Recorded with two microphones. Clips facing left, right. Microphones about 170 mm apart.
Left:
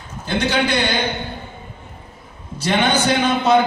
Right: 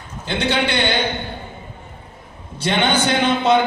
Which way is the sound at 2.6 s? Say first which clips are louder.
Left 1 dB; 25° right (ahead or behind).